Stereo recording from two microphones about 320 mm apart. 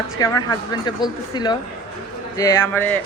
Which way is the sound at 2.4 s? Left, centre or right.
Centre.